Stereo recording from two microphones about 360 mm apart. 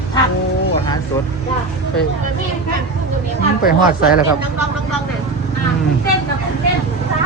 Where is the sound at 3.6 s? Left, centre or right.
Left.